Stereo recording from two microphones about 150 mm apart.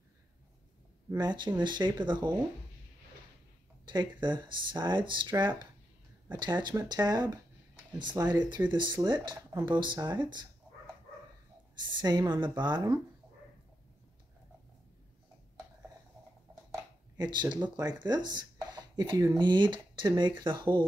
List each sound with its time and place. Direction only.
1.1 s speech: 30° right (ahead or behind)
3.8 s speech: 30° right (ahead or behind)
6.4 s speech: 30° right (ahead or behind)
12.0 s speech: 30° right (ahead or behind)
17.2 s speech: 30° right (ahead or behind)